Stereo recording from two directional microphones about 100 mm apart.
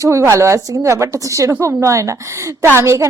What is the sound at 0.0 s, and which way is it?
A woman's voice, 30° right (ahead or behind).